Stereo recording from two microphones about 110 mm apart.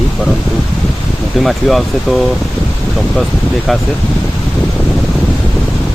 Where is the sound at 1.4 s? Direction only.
Centre (ahead or behind).